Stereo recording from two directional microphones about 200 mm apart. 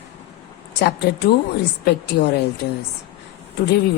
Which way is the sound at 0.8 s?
55° left (ahead or behind).